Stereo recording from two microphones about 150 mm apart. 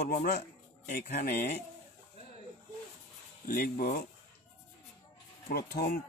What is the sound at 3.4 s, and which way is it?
Speech, 80° left.